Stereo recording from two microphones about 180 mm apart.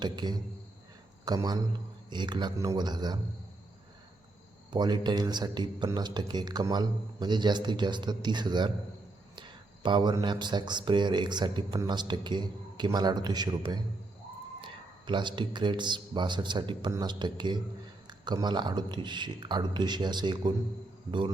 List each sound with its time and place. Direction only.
0.0 s a man's voice: 25° right (ahead or behind)
4.7 s speech: 25° right (ahead or behind)